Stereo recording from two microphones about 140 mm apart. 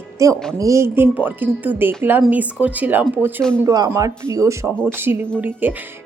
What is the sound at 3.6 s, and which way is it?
Speech, 25° right (ahead or behind).